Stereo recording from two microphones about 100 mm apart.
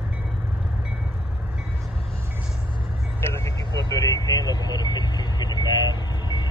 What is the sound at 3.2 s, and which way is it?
Vehicle, 30° left (ahead or behind).